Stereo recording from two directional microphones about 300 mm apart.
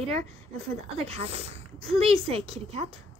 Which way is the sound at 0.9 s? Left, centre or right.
Centre.